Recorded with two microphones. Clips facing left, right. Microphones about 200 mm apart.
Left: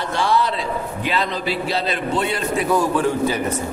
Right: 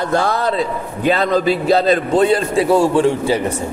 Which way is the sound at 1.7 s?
40° right (ahead or behind).